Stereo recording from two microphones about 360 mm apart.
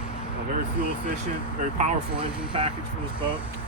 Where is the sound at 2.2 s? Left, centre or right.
Centre.